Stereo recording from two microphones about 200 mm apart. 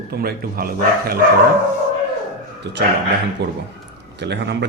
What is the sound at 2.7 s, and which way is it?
A man's voice, 60° right (ahead or behind).